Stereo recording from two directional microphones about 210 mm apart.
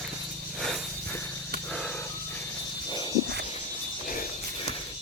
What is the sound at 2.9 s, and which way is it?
Cricket, 20° left (ahead or behind).